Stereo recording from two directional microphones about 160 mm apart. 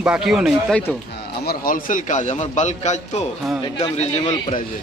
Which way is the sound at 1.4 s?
60° left (ahead or behind).